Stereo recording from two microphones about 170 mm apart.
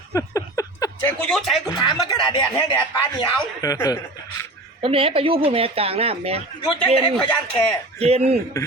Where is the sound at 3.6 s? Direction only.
20° left (ahead or behind).